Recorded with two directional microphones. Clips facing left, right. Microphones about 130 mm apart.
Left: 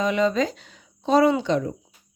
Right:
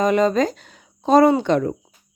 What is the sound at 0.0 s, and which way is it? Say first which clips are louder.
Speech: right 4 dB; 45° right (ahead or behind).